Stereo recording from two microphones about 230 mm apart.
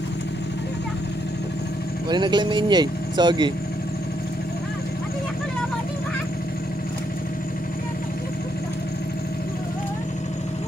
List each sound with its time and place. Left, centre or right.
2.0 s speech: centre